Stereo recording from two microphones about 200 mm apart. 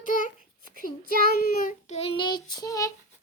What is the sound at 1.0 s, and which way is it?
Child singing, 45° right (ahead or behind).